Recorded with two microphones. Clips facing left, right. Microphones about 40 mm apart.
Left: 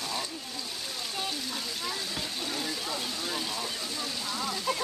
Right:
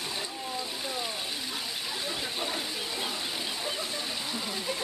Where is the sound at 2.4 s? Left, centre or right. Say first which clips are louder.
Even; centre.